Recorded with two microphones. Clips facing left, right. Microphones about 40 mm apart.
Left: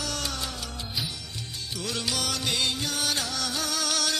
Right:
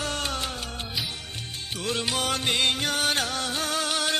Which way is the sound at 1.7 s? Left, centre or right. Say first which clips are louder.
Right 3 dB; right.